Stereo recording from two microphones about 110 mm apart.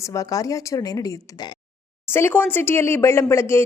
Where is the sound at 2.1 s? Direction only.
20° left (ahead or behind).